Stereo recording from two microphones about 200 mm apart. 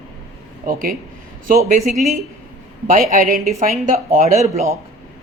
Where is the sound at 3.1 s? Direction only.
45° right (ahead or behind).